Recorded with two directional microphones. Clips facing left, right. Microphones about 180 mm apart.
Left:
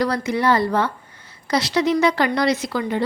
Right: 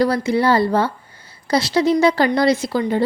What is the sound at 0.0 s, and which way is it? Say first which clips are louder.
A woman's voice: right 3 dB; 30° right (ahead or behind).